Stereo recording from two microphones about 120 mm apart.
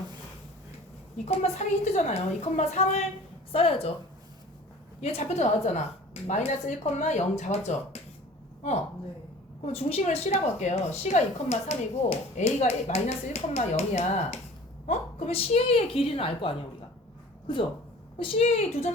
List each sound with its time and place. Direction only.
1.2 s a woman's voice: 75° left (ahead or behind)
3.5 s a woman's voice: 50° left (ahead or behind)
4.9 s a woman's voice: 60° left (ahead or behind); by 7.8 s 80° left
9.7 s a woman's voice: 55° left (ahead or behind)
14.8 s a woman's voice: 55° left (ahead or behind)
18.2 s a woman's voice: 60° left (ahead or behind)